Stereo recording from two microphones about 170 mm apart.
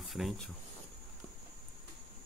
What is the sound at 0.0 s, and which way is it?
Speech, centre (ahead or behind).